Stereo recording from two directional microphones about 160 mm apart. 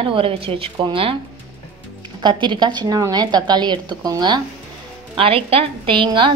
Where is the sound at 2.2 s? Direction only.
30° right (ahead or behind).